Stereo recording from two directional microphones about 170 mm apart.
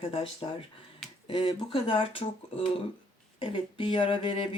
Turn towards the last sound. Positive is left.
turn(degrees=30)  # may be behind; listen again after turning